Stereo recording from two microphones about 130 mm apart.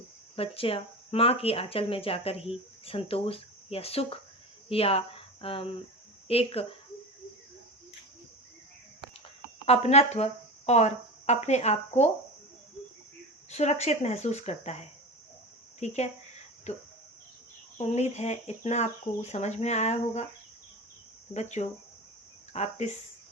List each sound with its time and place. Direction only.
0.3 s speech: 45° left (ahead or behind)
9.6 s speech: 55° left (ahead or behind)
13.5 s speech: 55° left (ahead or behind)
21.3 s speech: 60° left (ahead or behind)